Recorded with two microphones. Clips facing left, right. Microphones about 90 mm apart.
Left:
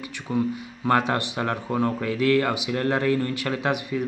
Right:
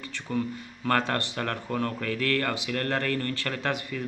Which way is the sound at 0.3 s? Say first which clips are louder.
Left 5 dB; 15° left (ahead or behind).